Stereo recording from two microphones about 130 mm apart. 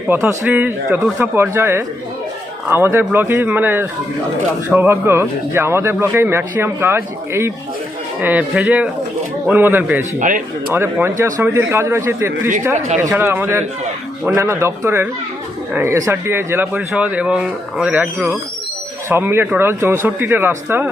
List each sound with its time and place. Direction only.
0.1 s a man's voice: 15° right (ahead or behind)
10.2 s speech: 90° right
10.8 s a man's voice: 15° right (ahead or behind)